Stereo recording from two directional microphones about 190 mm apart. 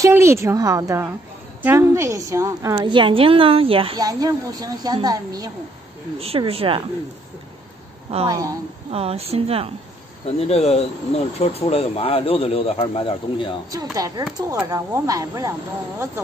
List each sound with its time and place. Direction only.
0.0 s a woman's voice: 15° right (ahead or behind)
6.1 s speech: 30° right (ahead or behind)
8.3 s a woman's voice: 20° right (ahead or behind)
8.9 s speech: 30° right (ahead or behind)
10.5 s speech: 35° left (ahead or behind)
13.9 s a woman's voice: 20° right (ahead or behind)